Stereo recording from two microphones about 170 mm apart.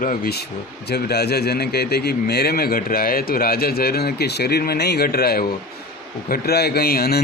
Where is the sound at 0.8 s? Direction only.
70° left (ahead or behind).